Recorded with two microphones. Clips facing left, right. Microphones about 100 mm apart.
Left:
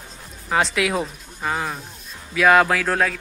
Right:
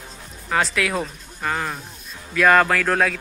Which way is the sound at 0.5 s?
20° left (ahead or behind).